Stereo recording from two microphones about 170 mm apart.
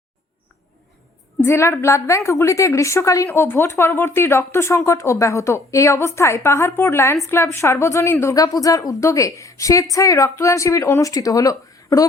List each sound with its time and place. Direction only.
1.4 s a woman's voice: 15° left (ahead or behind)